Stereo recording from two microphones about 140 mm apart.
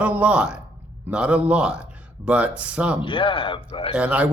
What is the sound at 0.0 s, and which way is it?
A man's voice, 10° right (ahead or behind).